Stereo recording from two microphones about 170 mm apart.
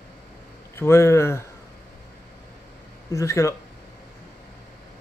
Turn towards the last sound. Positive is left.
turn(degrees=15)  # may be behind; listen again after turning